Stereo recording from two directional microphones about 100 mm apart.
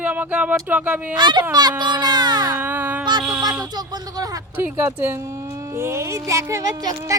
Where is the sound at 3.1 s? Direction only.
50° right (ahead or behind).